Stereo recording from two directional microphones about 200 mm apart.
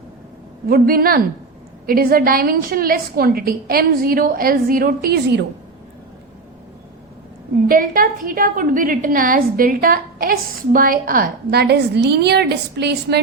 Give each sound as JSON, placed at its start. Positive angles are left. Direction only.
{"t": 0.7, "sound": "a woman's voice", "side_deg": -45}
{"t": 7.7, "sound": "a woman's voice", "side_deg": -45}